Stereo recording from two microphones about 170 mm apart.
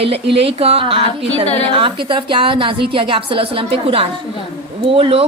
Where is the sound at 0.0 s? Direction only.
35° right (ahead or behind).